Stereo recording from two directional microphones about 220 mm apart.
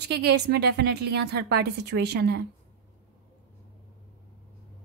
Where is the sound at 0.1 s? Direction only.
50° right (ahead or behind).